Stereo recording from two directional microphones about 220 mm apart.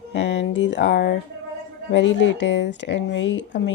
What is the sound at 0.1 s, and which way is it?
Speech, 55° left (ahead or behind).